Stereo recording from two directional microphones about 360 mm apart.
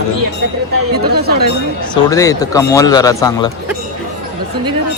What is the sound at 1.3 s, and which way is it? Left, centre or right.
Speech, right.